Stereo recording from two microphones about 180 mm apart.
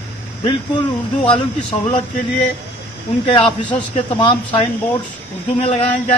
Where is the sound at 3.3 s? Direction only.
25° left (ahead or behind).